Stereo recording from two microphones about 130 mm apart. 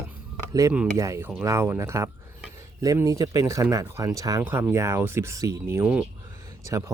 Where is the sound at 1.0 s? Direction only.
25° right (ahead or behind).